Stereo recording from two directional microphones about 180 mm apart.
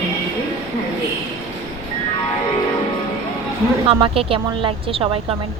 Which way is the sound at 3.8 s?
30° right (ahead or behind).